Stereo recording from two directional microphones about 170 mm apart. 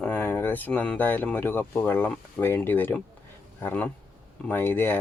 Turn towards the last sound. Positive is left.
turn(degrees=10)  # may be behind; listen again after turning